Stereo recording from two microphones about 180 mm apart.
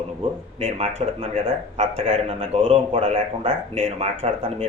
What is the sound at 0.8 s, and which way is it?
Speech, 35° right (ahead or behind).